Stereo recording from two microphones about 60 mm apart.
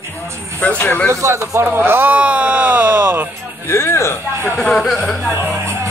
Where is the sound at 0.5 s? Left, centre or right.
Left.